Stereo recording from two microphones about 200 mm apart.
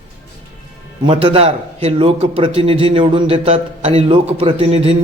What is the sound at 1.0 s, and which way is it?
A man's voice, 25° right (ahead or behind).